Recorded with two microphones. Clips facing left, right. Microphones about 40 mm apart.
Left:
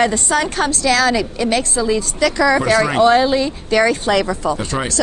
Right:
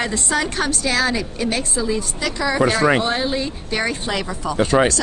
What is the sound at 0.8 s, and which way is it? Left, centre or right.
A woman's voice, left.